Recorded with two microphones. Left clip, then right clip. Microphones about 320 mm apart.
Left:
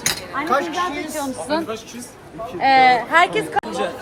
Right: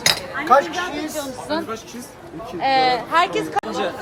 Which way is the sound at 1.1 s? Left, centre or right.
Left.